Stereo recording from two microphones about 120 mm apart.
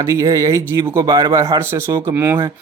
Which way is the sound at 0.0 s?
25° right (ahead or behind).